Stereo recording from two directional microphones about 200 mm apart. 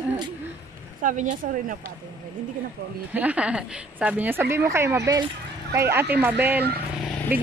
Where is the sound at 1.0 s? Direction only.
40° right (ahead or behind).